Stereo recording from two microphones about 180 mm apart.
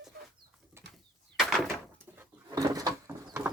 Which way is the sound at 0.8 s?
15° right (ahead or behind).